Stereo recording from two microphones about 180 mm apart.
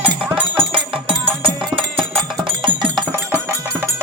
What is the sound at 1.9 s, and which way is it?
Music, centre (ahead or behind).